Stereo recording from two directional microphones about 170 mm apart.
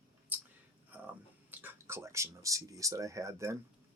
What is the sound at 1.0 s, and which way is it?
Speech, 10° right (ahead or behind).